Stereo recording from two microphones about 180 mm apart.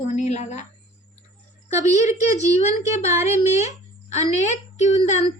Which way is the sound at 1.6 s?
40° left (ahead or behind).